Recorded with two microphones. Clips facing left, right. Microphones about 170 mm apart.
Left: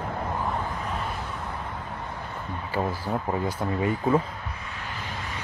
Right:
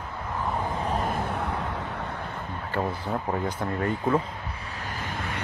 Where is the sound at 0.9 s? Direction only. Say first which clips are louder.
Right 5 dB; 45° right (ahead or behind); by 2.1 s 75° right (ahead or behind).